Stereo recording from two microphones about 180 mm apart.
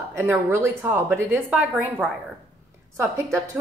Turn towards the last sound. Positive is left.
turn(degrees=-15)  # may be behind; listen again after turning